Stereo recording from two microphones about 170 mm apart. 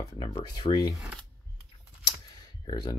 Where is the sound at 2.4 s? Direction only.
25° left (ahead or behind).